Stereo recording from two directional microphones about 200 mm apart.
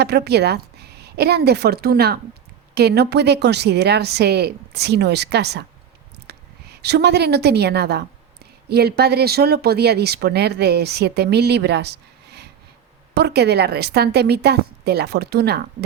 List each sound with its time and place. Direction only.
0.0 s a woman's voice: 55° right (ahead or behind)